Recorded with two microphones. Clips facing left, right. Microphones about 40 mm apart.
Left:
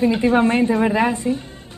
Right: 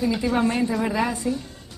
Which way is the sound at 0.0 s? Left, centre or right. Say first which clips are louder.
Left 6 dB; left.